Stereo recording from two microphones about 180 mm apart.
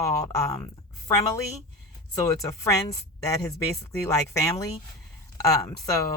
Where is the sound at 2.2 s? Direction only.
15° left (ahead or behind).